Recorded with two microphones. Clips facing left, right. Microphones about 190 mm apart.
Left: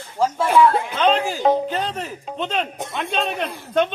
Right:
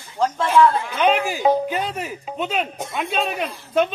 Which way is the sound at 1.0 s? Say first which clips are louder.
Even; 10° right (ahead or behind).